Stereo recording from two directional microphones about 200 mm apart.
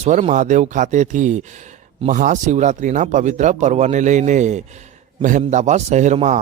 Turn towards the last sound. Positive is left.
turn(degrees=-35)  # may be behind; listen again after turning